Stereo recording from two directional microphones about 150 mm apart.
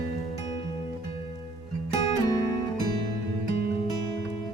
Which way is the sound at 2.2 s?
25° left (ahead or behind).